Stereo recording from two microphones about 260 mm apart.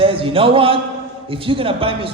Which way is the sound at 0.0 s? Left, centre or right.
Right.